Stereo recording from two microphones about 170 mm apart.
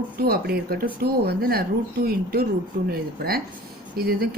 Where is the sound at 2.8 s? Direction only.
65° right (ahead or behind).